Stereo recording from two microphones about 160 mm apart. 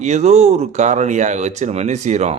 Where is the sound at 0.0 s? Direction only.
45° right (ahead or behind).